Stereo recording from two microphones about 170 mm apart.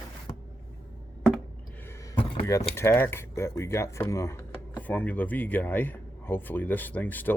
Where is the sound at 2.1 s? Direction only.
30° left (ahead or behind).